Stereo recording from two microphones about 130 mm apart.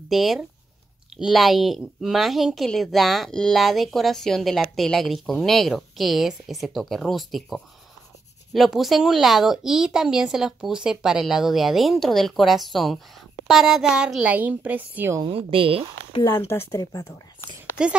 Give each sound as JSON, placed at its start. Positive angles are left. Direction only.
{"t": 0.1, "sound": "a woman's voice", "side_deg": 0}
{"t": 15.2, "sound": "speech", "side_deg": -45}
{"t": 16.3, "sound": "a woman's voice", "side_deg": 20}
{"t": 17.8, "sound": "a woman's voice", "side_deg": -5}